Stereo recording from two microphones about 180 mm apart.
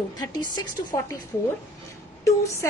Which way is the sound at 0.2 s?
20° left (ahead or behind).